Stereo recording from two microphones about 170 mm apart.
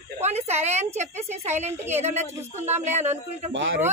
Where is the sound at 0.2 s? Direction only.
40° right (ahead or behind).